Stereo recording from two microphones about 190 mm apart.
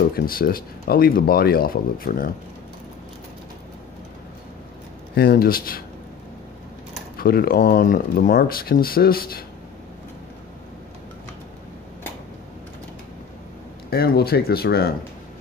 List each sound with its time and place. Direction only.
0.1 s speech: 50° left (ahead or behind)
5.1 s speech: 50° left (ahead or behind)
7.2 s speech: 50° left (ahead or behind)
13.8 s speech: 55° left (ahead or behind)